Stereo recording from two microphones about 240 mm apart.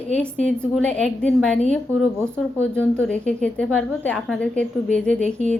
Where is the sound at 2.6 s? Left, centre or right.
Centre.